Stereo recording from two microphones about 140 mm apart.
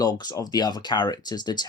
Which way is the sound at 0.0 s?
30° left (ahead or behind).